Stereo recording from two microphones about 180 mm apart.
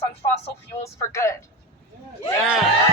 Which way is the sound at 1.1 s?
15° left (ahead or behind).